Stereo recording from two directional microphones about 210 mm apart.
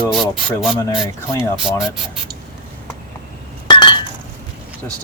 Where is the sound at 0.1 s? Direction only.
Centre (ahead or behind).